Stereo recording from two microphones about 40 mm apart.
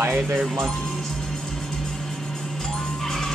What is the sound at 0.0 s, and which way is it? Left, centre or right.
Speech, right.